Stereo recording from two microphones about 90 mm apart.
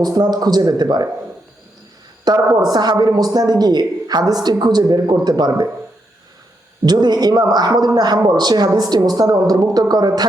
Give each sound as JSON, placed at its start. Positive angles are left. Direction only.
{"t": 0.0, "sound": "a woman's voice", "side_deg": -50}
{"t": 2.2, "sound": "a woman's voice", "side_deg": -50}
{"t": 6.8, "sound": "a woman's voice", "side_deg": -50}